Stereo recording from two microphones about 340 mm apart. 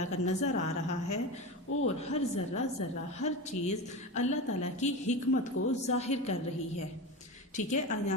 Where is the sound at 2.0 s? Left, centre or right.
Centre.